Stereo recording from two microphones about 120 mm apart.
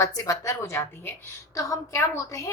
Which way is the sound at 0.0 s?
30° left (ahead or behind).